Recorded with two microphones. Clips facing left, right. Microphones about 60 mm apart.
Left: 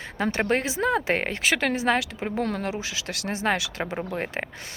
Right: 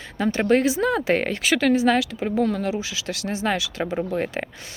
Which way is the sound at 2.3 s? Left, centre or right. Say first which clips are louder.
Right 5 dB; left.